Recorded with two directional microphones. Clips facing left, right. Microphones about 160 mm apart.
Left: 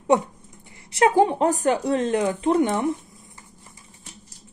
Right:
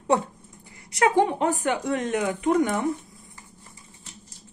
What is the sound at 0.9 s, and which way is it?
Speech, 30° left (ahead or behind).